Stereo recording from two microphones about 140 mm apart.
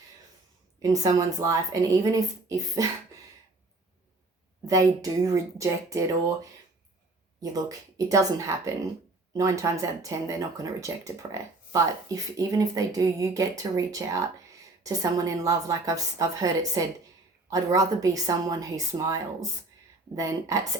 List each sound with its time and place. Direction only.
0.8 s speech: 25° right (ahead or behind)
4.6 s speech: 25° right (ahead or behind)
7.5 s speech: 25° right (ahead or behind)